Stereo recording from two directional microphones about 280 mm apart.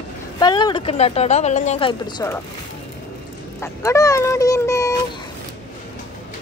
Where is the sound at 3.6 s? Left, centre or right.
Centre.